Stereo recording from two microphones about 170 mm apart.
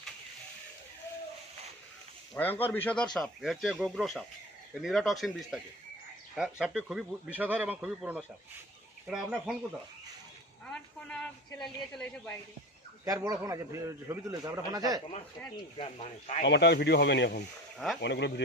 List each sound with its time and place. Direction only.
2.3 s speech: 10° left (ahead or behind); by 9.6 s 5° right (ahead or behind)
10.7 s speech: 5° left (ahead or behind)
13.1 s a man's voice: 20° right (ahead or behind)
15.8 s speech: 40° left (ahead or behind)
16.4 s speech: 90° left